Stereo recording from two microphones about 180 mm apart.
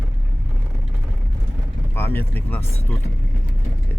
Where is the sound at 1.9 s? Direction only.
10° left (ahead or behind).